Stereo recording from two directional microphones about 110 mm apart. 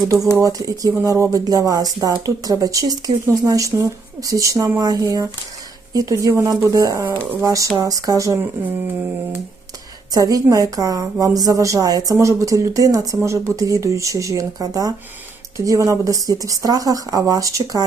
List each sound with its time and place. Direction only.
0.3 s speech: 30° right (ahead or behind)
10.1 s speech: 35° right (ahead or behind)